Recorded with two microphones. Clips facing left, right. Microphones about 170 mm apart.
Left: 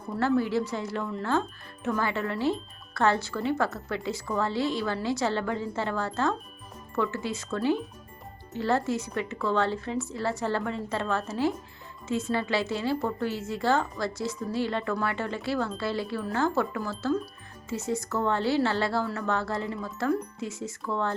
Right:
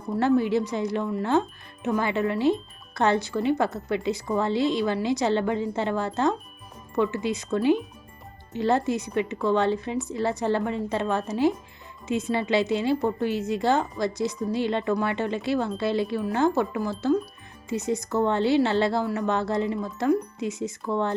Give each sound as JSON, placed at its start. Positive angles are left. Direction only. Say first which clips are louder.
{"t": 0.2, "sound": "speech", "louder": "right 3 dB", "side_deg": -20}